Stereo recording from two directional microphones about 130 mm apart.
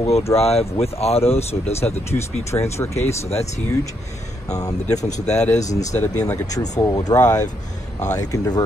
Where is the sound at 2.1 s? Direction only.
20° left (ahead or behind).